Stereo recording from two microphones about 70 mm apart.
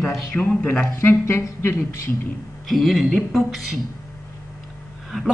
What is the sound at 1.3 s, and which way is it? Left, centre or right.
Speech, left.